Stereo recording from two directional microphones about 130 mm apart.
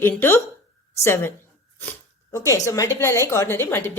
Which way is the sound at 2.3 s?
25° left (ahead or behind).